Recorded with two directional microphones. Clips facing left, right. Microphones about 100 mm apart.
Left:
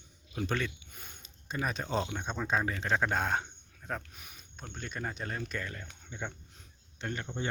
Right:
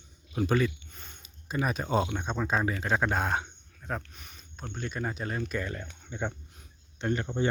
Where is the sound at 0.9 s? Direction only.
5° left (ahead or behind).